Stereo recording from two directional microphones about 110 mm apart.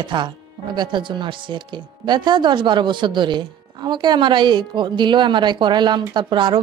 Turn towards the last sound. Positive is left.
turn(degrees=-45)  # may be behind; listen again after turning